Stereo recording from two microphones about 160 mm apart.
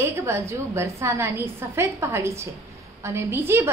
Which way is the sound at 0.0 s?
15° right (ahead or behind).